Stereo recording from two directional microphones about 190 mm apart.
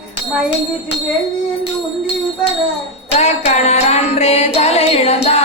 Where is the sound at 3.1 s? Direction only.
35° left (ahead or behind).